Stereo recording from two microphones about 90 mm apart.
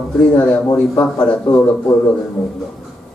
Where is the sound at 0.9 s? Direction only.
15° left (ahead or behind).